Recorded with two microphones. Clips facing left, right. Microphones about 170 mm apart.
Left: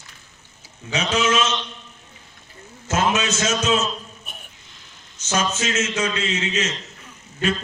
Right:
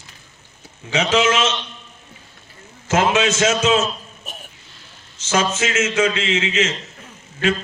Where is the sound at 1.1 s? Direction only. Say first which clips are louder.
Right 3 dB; 90° right.